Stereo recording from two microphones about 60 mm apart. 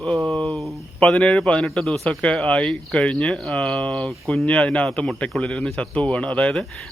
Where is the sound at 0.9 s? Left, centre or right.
Centre.